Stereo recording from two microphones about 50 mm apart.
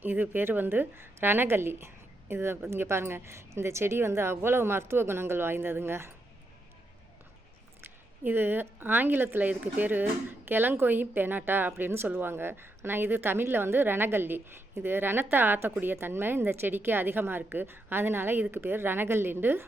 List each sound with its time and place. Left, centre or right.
0.0 s a woman's voice: right
7.8 s a woman's voice: right
9.5 s a woman's voice: right